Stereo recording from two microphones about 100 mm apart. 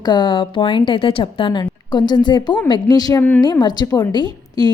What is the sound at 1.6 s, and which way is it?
A woman's voice, 45° left (ahead or behind).